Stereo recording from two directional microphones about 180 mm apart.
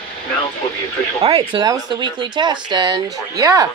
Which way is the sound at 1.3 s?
25° right (ahead or behind).